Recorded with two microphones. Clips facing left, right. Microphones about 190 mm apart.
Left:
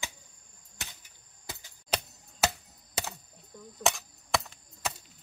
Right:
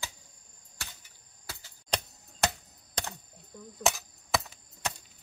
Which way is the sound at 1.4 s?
20° left (ahead or behind).